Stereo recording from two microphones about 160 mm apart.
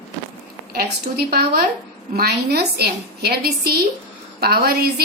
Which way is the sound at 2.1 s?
85° right.